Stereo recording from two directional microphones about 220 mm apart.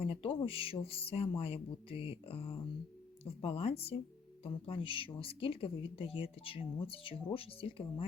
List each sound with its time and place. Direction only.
0.0 s speech: 25° left (ahead or behind)